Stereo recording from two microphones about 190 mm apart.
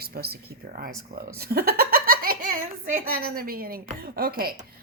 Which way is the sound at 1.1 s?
55° right (ahead or behind).